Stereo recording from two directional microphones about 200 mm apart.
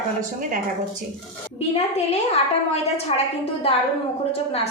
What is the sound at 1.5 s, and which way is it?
A woman's voice, 30° left (ahead or behind).